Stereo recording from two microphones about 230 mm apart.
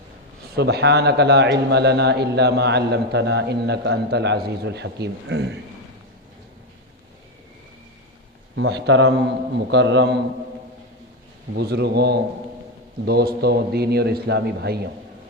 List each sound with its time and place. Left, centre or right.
0.5 s a man's voice: right
8.5 s a man's voice: right
11.5 s a man's voice: right